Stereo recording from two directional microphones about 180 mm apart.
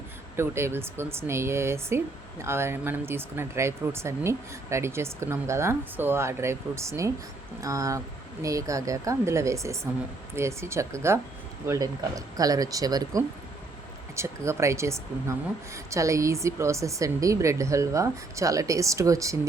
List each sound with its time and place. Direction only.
0.3 s a woman's voice: 15° right (ahead or behind)